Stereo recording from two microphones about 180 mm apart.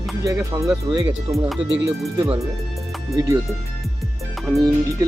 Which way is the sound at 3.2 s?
20° right (ahead or behind).